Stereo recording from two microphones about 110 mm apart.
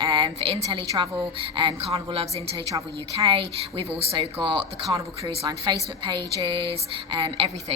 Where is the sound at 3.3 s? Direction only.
55° right (ahead or behind).